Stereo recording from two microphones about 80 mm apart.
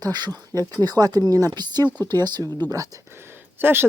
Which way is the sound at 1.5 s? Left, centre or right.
Right.